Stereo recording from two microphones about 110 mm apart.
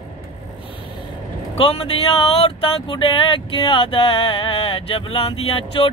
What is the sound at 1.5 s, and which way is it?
Speech, 60° left (ahead or behind).